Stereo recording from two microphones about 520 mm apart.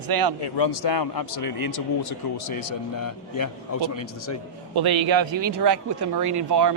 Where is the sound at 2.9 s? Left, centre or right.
Left.